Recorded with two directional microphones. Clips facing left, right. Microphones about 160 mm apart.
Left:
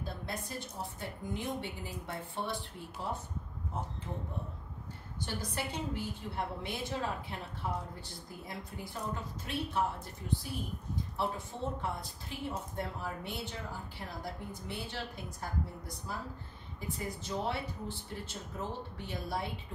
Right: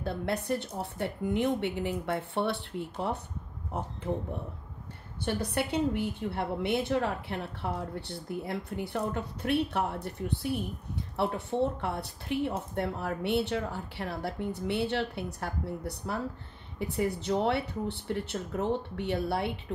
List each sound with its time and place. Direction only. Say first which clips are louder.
0.0 s a woman's voice: right 9 dB; 65° right (ahead or behind)
5.4 s a woman's voice: right 10 dB; 70° right (ahead or behind)